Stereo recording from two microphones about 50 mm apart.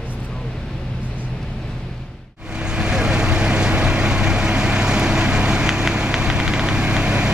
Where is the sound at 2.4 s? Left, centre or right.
Centre.